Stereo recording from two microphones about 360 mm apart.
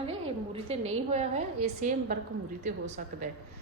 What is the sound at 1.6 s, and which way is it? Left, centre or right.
A woman's voice, right.